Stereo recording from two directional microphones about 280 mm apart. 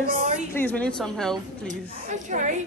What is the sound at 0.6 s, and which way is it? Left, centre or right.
Speech, centre.